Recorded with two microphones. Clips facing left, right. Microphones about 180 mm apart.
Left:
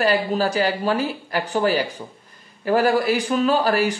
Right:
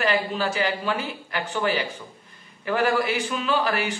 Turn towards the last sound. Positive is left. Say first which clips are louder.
# left 5 dB
turn(degrees=40)  # may be behind; listen again after turning